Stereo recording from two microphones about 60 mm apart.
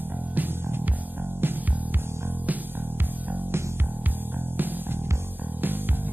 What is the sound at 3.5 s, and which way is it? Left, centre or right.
Music, right.